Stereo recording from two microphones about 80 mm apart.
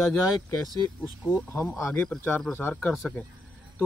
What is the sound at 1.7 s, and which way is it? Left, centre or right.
Speech, centre.